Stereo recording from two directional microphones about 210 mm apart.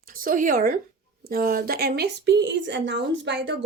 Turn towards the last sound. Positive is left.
turn(degrees=-55)  # may be behind; listen again after turning